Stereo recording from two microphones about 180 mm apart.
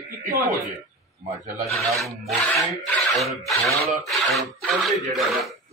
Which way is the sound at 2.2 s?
5° left (ahead or behind).